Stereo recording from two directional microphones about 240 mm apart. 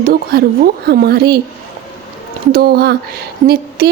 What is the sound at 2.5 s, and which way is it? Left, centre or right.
A woman's voice, right.